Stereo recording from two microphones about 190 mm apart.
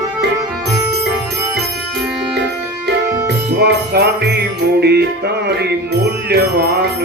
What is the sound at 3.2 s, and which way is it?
Jingle bell, 60° right (ahead or behind).